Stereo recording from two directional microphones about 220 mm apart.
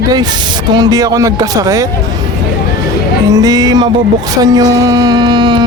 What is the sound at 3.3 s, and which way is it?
Speech, 15° right (ahead or behind).